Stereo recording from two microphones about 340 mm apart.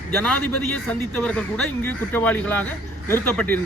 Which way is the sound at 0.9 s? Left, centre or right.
Centre.